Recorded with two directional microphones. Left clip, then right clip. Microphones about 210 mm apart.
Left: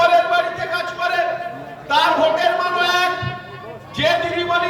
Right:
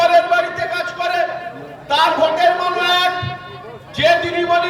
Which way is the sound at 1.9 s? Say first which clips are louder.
Right 1 dB; 15° right (ahead or behind).